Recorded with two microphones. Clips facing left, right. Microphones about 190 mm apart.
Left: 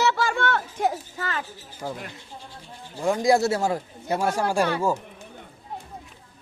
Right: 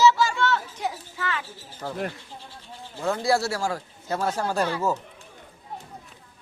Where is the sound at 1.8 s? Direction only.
15° left (ahead or behind).